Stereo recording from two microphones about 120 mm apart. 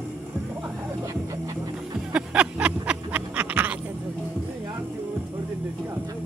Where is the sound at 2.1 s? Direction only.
10° right (ahead or behind).